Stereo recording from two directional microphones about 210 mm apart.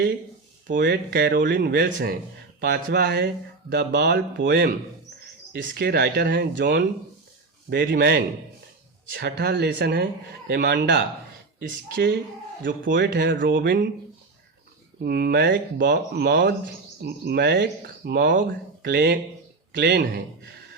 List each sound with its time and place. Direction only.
0.7 s speech: 55° right (ahead or behind)
1.9 s a man's voice: 40° right (ahead or behind)
2.6 s speech: 50° right (ahead or behind)
12.8 s speech: 60° right (ahead or behind)
15.0 s speech: 50° right (ahead or behind)